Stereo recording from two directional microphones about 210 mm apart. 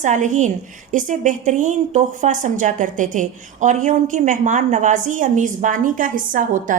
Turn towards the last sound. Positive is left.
turn(degrees=-40)  # may be behind; listen again after turning